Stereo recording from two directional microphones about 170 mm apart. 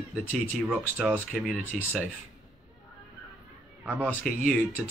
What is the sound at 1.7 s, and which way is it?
Speech, centre (ahead or behind).